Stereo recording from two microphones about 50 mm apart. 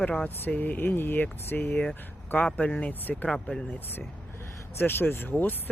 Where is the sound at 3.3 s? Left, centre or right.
Centre.